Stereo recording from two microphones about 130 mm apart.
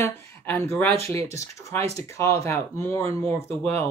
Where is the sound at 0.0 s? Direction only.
20° left (ahead or behind).